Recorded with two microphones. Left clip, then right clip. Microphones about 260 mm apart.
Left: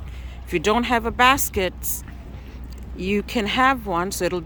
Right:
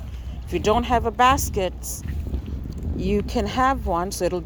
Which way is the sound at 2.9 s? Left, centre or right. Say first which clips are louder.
Even; centre.